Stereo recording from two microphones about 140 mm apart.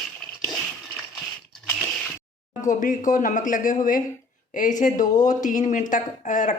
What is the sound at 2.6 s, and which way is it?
Speech, 65° left (ahead or behind).